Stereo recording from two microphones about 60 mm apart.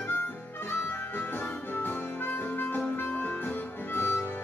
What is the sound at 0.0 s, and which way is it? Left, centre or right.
Harmonica, left.